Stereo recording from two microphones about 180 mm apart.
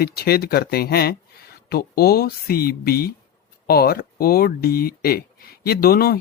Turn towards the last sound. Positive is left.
turn(degrees=60)  # may be behind; listen again after turning